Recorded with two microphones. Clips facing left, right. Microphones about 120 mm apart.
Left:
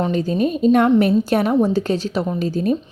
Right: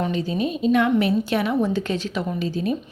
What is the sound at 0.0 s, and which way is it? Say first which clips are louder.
A woman's voice: left 5 dB; 40° left (ahead or behind).